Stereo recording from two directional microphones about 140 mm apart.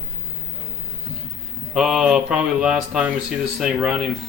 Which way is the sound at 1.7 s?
5° right (ahead or behind).